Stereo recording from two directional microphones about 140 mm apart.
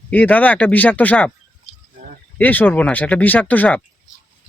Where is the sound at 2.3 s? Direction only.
10° left (ahead or behind).